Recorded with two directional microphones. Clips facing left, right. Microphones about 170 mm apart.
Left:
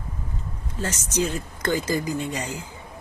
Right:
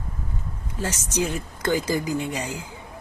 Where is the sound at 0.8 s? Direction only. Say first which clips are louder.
Even; 10° right (ahead or behind).